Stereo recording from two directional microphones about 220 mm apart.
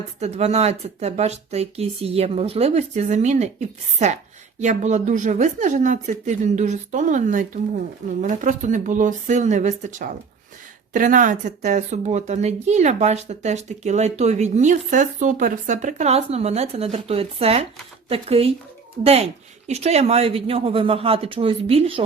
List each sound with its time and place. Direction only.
0.2 s a woman's voice: 30° right (ahead or behind)